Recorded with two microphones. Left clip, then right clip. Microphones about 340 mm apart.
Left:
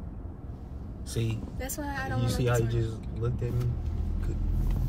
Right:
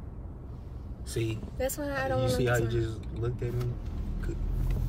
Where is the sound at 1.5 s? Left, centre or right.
Centre.